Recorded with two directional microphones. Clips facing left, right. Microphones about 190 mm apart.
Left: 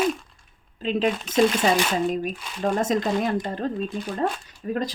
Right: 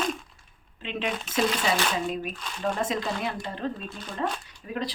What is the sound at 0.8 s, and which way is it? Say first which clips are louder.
Speech: left 8 dB; 40° left (ahead or behind).